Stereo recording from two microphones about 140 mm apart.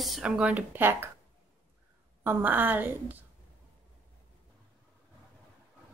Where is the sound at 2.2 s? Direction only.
15° right (ahead or behind).